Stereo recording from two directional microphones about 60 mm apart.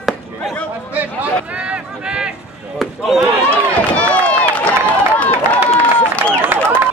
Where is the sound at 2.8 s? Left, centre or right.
Centre.